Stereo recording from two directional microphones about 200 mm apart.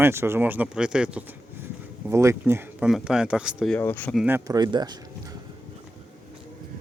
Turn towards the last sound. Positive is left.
turn(degrees=-20)  # may be behind; listen again after turning